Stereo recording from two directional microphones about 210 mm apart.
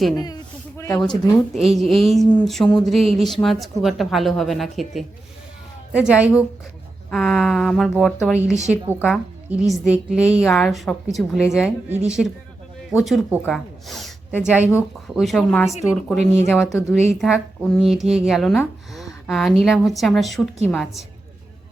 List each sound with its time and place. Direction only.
0.8 s speech: 15° left (ahead or behind)
1.5 s speech: centre (ahead or behind)
9.0 s speech: 10° left (ahead or behind)
9.6 s speech: 5° right (ahead or behind)